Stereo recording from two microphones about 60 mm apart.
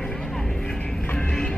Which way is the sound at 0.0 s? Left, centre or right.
Centre.